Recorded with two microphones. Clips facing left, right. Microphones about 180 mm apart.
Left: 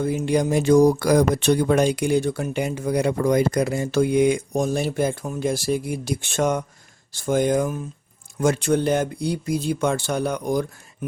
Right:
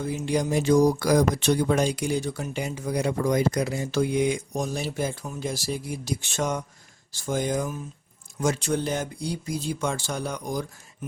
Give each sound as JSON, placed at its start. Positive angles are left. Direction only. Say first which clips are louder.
{"t": 0.0, "sound": "speech", "louder": "left 5 dB", "side_deg": 55}